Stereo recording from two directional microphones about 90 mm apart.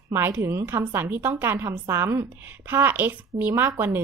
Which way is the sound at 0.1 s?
25° right (ahead or behind).